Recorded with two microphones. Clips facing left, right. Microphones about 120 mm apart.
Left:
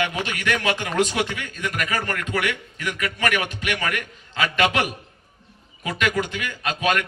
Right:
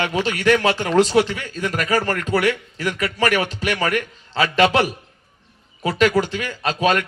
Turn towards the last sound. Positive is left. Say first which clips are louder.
# right 4 dB
turn(degrees=-35)  # may be behind; listen again after turning